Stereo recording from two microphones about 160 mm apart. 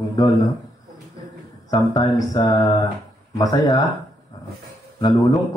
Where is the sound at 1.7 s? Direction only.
25° left (ahead or behind).